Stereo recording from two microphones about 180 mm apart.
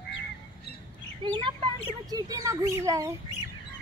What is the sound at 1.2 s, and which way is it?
Bird, 25° right (ahead or behind).